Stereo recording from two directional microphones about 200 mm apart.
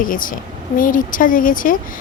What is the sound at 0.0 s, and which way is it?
A woman's voice, 45° left (ahead or behind).